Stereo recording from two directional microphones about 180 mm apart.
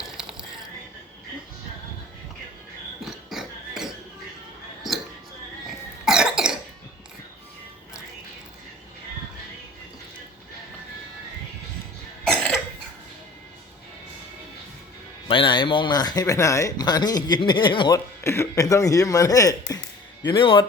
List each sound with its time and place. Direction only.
0.2 s a sound: centre (ahead or behind)
3.0 s a sound: centre (ahead or behind)
5.6 s cough: 5° right (ahead or behind)
12.2 s cough: 5° left (ahead or behind)
15.3 s speech: 25° left (ahead or behind)
18.2 s speech: 15° left (ahead or behind)